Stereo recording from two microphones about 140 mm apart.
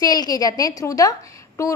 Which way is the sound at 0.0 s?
25° left (ahead or behind).